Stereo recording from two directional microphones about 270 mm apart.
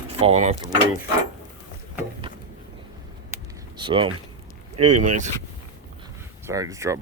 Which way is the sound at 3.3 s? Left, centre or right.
Centre.